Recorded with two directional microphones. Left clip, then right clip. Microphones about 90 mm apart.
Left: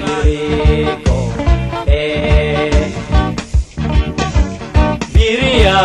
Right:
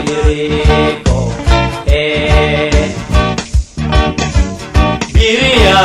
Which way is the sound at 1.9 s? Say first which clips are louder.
Right 4 dB; 25° right (ahead or behind).